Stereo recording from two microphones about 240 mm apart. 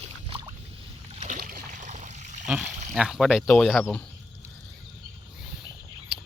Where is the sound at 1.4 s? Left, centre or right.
Right.